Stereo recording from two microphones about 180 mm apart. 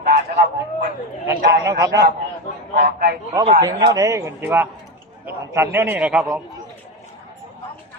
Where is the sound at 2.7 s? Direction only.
60° right (ahead or behind).